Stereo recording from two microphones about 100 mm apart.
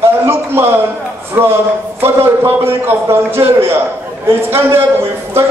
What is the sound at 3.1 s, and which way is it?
A man's voice, 25° right (ahead or behind).